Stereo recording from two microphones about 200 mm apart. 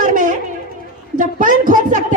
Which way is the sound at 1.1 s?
40° right (ahead or behind).